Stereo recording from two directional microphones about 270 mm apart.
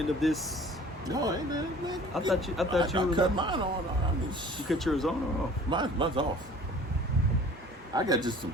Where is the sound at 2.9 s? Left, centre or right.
Centre.